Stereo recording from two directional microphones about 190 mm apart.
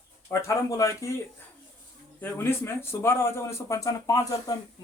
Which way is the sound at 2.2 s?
15° left (ahead or behind).